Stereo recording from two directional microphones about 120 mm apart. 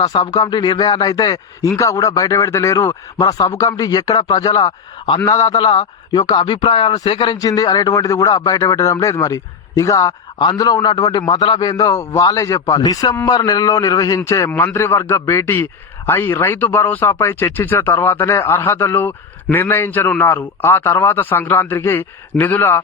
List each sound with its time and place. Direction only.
0.0 s a man's voice: 35° left (ahead or behind)
7.3 s a man's voice: 30° left (ahead or behind)